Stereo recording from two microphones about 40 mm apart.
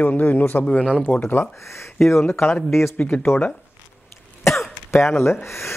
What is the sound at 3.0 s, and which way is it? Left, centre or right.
Speech, left.